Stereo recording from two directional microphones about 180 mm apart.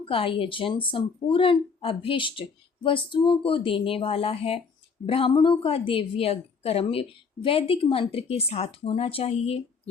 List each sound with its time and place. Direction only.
0.0 s a woman's voice: 30° left (ahead or behind)